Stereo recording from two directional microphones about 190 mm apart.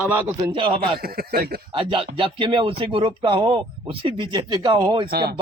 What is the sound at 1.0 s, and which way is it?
Speech, 50° right (ahead or behind).